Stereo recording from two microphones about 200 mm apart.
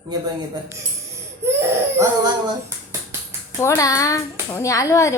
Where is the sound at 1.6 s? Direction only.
15° right (ahead or behind).